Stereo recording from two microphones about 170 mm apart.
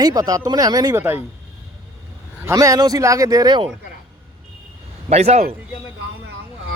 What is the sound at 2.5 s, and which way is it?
Speech, 20° right (ahead or behind).